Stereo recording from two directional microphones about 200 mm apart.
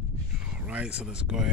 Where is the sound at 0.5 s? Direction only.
5° right (ahead or behind).